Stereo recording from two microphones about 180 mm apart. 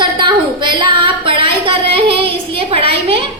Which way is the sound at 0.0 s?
25° right (ahead or behind).